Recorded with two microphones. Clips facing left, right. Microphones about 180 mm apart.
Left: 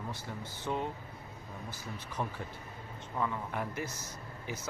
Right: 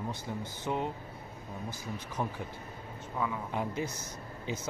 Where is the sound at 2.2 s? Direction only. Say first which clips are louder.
Right 2 dB; 10° right (ahead or behind).